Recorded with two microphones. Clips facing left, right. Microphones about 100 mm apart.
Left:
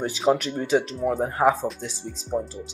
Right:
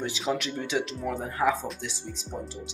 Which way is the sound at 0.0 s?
40° left (ahead or behind).